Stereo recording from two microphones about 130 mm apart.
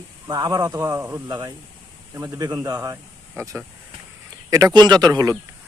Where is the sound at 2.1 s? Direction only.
20° right (ahead or behind).